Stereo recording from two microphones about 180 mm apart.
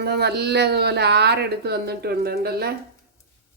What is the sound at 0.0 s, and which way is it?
Speech, 65° right (ahead or behind).